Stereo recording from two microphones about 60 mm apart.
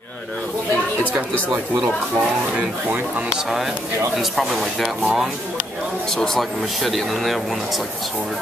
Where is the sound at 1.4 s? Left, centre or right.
Centre.